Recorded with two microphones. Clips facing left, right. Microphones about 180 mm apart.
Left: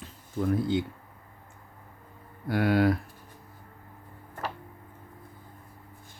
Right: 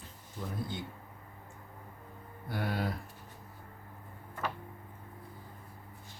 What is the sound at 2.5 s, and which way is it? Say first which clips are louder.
Speech: left 12 dB; 80° left.